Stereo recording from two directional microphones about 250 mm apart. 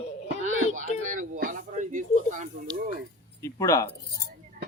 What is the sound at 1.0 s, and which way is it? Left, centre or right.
Speech, right.